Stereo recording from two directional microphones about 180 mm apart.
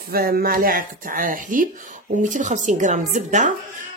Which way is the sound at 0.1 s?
55° right (ahead or behind).